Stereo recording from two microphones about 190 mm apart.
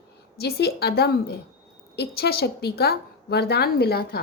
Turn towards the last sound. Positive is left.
turn(degrees=55)  # may be behind; listen again after turning